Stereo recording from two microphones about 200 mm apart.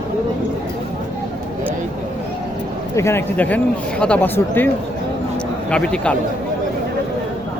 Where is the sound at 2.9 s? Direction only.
15° left (ahead or behind).